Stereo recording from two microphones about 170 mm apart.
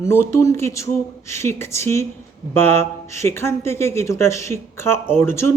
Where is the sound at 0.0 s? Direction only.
15° left (ahead or behind).